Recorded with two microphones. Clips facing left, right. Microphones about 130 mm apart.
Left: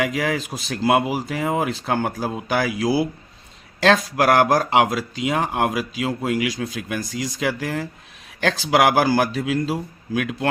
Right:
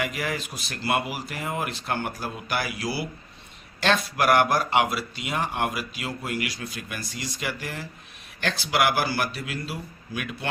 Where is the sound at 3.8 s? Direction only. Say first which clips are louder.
Left 5 dB; 90° left.